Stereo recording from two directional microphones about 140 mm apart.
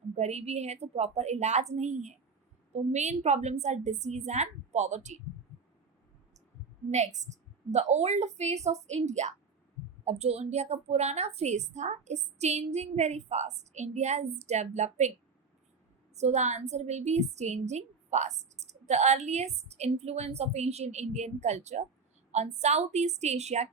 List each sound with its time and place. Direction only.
0.2 s a woman's voice: 50° right (ahead or behind)
6.9 s a woman's voice: 55° right (ahead or behind)
16.1 s a woman's voice: 55° right (ahead or behind)